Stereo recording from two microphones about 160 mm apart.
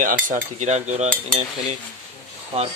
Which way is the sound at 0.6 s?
45° right (ahead or behind).